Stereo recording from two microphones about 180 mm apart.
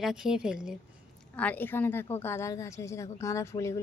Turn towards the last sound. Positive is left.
turn(degrees=15)  # may be behind; listen again after turning